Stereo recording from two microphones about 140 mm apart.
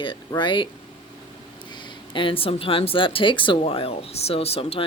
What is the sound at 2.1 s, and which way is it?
Speech, 40° left (ahead or behind).